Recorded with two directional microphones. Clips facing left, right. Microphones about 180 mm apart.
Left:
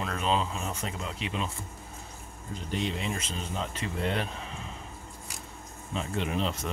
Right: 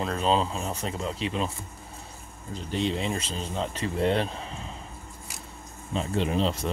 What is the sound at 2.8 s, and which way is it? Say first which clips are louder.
Speech: right 6 dB; 30° right (ahead or behind).